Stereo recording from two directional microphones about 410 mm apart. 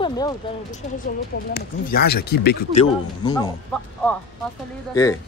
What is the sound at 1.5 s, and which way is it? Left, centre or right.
Speech, left.